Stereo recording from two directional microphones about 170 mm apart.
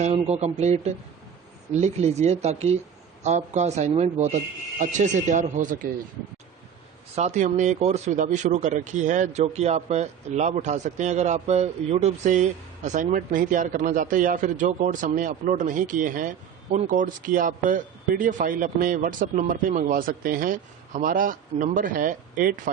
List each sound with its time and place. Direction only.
0.0 s speech: 40° right (ahead or behind)
7.2 s speech: 45° right (ahead or behind)